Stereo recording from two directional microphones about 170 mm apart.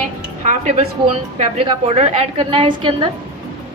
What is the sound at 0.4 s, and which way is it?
A woman's voice, 40° right (ahead or behind).